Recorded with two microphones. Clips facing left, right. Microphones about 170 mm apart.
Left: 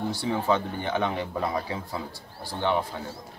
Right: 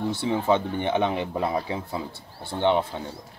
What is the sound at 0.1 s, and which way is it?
Speech, 25° right (ahead or behind).